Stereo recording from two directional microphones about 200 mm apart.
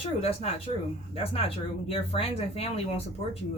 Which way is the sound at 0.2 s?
30° left (ahead or behind).